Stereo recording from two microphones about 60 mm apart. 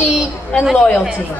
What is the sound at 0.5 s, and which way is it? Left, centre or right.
Speech, centre.